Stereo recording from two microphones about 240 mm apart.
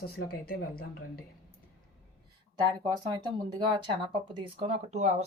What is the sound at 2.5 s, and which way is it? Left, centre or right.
Speech, centre.